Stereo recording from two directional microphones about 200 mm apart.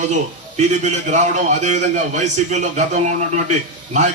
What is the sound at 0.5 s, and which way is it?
A man's voice, 35° right (ahead or behind).